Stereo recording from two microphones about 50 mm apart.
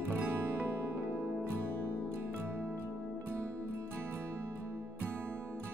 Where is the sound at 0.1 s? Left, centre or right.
Right.